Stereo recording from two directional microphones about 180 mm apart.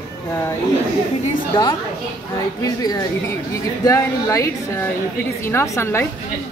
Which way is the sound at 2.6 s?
20° left (ahead or behind).